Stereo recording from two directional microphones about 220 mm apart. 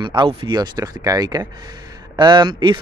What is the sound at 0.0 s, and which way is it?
Speech, 20° right (ahead or behind).